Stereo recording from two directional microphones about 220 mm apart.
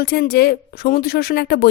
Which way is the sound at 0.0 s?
45° left (ahead or behind).